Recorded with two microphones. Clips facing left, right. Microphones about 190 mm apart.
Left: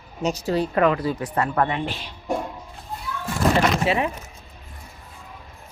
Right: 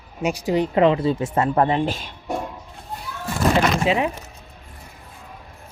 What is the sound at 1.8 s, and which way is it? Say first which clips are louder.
Speech: right 5 dB; 45° right (ahead or behind).